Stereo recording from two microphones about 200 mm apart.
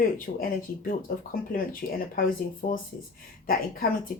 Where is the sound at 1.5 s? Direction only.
45° left (ahead or behind).